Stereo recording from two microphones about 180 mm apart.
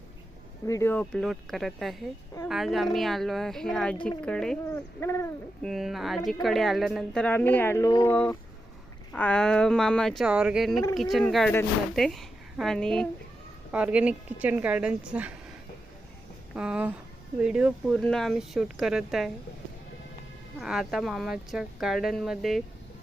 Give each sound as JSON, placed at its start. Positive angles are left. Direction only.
{"t": 0.7, "sound": "speech", "side_deg": 15}
{"t": 4.7, "sound": "speech", "side_deg": 15}
{"t": 5.6, "sound": "a woman's voice", "side_deg": 0}
{"t": 13.7, "sound": "a woman's voice", "side_deg": -5}
{"t": 16.6, "sound": "speech", "side_deg": -5}
{"t": 20.6, "sound": "speech", "side_deg": -5}